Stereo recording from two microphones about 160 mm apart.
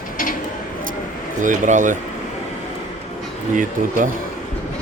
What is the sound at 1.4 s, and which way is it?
Speech, 50° right (ahead or behind).